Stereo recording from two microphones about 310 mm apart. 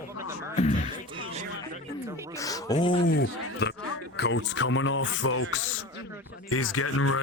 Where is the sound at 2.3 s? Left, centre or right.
Centre.